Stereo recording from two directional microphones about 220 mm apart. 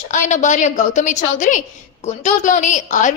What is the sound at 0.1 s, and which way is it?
A woman's voice, 35° left (ahead or behind).